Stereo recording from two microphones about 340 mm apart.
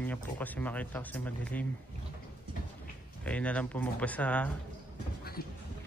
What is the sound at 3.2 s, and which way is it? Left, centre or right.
Speech, centre.